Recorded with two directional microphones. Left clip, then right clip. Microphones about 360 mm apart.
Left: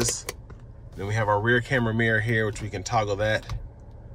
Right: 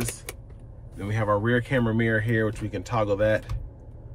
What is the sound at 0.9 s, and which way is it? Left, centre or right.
Speech, centre.